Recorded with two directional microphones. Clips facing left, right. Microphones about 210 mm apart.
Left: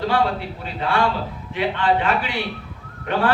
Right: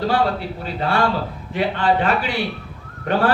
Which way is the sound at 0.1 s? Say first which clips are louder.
Right 1 dB; 40° right (ahead or behind).